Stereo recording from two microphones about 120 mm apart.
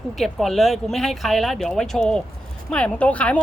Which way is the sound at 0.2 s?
Centre (ahead or behind).